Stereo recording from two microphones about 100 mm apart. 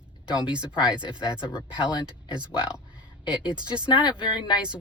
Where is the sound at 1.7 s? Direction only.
50° left (ahead or behind).